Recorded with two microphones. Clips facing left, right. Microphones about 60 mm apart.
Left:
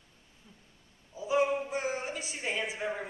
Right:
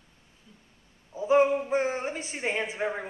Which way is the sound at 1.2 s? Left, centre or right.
Right.